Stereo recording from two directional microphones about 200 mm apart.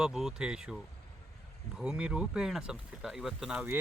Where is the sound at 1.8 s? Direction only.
5° right (ahead or behind).